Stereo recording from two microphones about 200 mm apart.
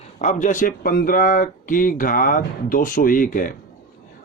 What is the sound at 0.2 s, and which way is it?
Speech, 35° left (ahead or behind).